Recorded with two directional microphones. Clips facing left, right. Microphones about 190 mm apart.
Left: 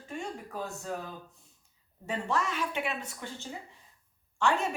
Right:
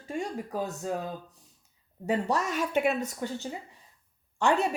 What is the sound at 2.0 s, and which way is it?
A woman's voice, 40° right (ahead or behind).